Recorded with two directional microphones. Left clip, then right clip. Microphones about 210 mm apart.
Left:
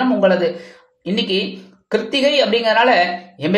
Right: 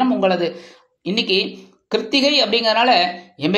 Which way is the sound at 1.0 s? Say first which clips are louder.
Right 1 dB; centre (ahead or behind).